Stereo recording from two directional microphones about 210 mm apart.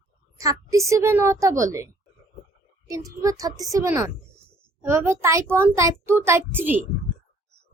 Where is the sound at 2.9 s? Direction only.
15° right (ahead or behind).